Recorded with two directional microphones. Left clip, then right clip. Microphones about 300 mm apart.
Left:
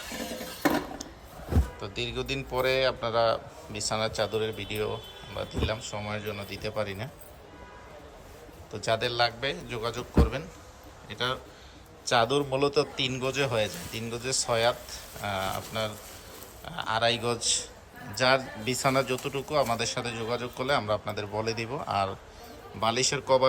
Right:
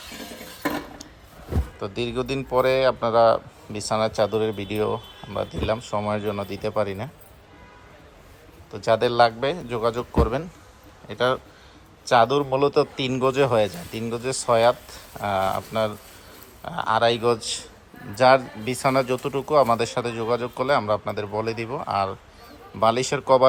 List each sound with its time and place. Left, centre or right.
1.8 s speech: centre
8.7 s speech: centre